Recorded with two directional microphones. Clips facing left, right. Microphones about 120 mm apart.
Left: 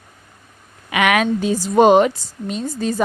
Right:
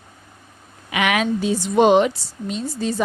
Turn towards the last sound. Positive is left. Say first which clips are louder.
# left 2 dB
turn(degrees=50)  # may be behind; listen again after turning